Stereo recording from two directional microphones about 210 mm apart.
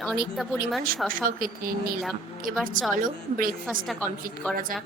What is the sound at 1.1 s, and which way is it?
A woman's voice, 40° right (ahead or behind).